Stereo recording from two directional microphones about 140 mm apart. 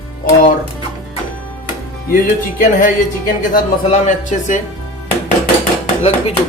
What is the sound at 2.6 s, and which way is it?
Speech, 70° left (ahead or behind).